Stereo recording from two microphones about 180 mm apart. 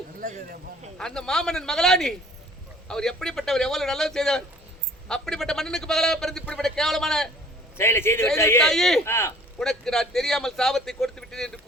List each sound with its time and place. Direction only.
0.2 s speech: 45° right (ahead or behind)
0.9 s a man's voice: 5° left (ahead or behind)
7.8 s a man's voice: 15° left (ahead or behind)
8.6 s a man's voice: centre (ahead or behind)
9.0 s a man's voice: 15° left (ahead or behind)
9.6 s a man's voice: 5° left (ahead or behind)